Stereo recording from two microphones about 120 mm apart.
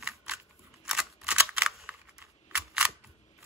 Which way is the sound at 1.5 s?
5° right (ahead or behind).